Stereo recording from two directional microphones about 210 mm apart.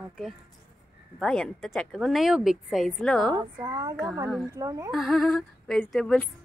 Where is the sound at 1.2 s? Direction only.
5° left (ahead or behind).